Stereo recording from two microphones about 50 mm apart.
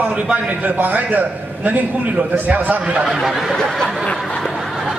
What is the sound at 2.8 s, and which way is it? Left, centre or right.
Speech, centre.